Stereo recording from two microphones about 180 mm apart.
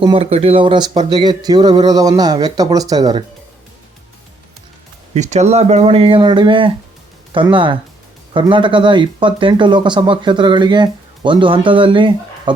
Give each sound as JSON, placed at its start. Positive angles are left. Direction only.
{"t": 0.0, "sound": "speech", "side_deg": -30}
{"t": 5.1, "sound": "speech", "side_deg": -40}